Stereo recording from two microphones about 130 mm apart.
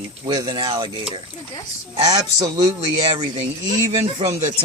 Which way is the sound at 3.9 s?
45° right (ahead or behind).